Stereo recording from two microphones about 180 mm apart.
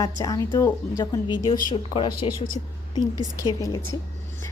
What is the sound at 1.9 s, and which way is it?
Speech, 30° left (ahead or behind).